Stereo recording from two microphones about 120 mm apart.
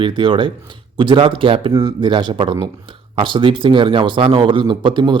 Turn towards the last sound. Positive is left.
turn(degrees=-40)  # may be behind; listen again after turning